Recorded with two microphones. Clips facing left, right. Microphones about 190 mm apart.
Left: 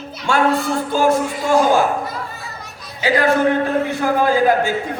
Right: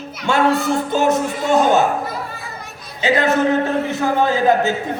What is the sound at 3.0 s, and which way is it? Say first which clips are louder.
Speech: left 1 dB; 25° right (ahead or behind).